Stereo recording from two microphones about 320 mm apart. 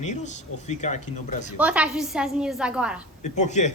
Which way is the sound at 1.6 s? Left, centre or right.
Centre.